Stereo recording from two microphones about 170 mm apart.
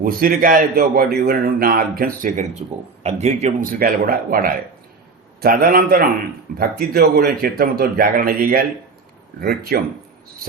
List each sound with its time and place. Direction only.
0.0 s a man's voice: 55° right (ahead or behind)
3.0 s speech: 40° right (ahead or behind)
3.6 s a man's voice: 55° right (ahead or behind)